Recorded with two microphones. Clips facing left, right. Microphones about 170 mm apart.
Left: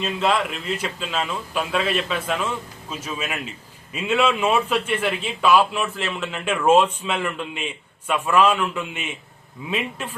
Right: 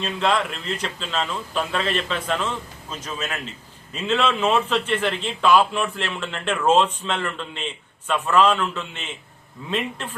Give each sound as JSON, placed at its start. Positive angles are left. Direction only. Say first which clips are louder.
{"t": 0.0, "sound": "a man's voice", "louder": "left 1 dB", "side_deg": 5}